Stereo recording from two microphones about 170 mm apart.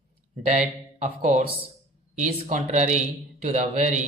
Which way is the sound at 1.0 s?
45° right (ahead or behind).